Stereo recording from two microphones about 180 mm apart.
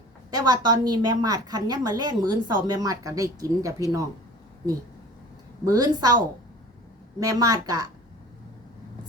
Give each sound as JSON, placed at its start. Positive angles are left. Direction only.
{"t": 0.3, "sound": "a woman's voice", "side_deg": -20}
{"t": 5.6, "sound": "a woman's voice", "side_deg": -20}
{"t": 7.2, "sound": "a woman's voice", "side_deg": -20}